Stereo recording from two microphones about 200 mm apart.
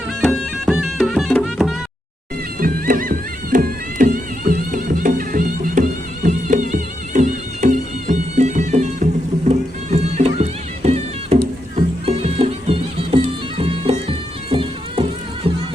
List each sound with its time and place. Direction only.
0.2 s music: centre (ahead or behind)
2.6 s music: 45° right (ahead or behind); by 13.2 s 25° right (ahead or behind)
13.2 s bagpipes: 30° right (ahead or behind)